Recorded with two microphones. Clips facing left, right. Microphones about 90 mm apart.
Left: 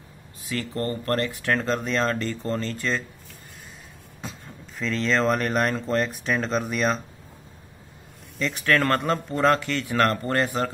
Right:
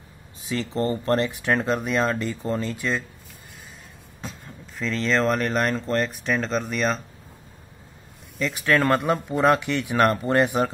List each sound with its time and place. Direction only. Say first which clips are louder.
0.5 s speech: right 3 dB; 20° right (ahead or behind)
4.2 s speech: right 1 dB; centre (ahead or behind)
8.4 s speech: right 1 dB; 5° right (ahead or behind)